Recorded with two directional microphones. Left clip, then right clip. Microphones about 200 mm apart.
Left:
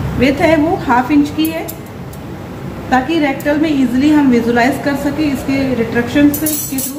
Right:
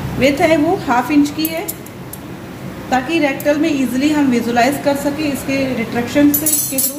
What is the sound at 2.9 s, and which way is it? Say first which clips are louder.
A woman's voice: left 2 dB; 25° right (ahead or behind).